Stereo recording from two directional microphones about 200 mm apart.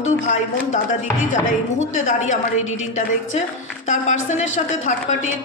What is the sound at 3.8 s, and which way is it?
A woman's voice, 35° left (ahead or behind).